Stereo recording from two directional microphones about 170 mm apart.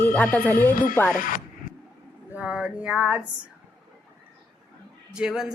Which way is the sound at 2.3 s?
10° right (ahead or behind).